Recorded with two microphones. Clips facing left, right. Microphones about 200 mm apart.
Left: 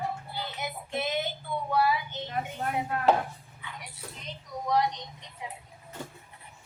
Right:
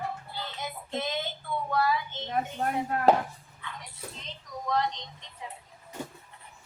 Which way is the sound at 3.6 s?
10° left (ahead or behind).